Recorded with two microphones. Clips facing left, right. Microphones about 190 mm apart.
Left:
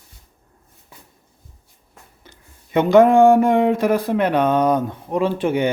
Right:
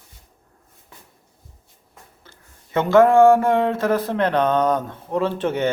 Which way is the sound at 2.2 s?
15° left (ahead or behind).